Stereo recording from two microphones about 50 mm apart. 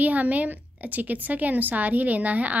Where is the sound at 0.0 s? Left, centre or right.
Right.